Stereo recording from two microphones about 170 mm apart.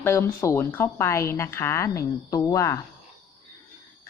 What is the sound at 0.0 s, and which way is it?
Speech, 15° left (ahead or behind).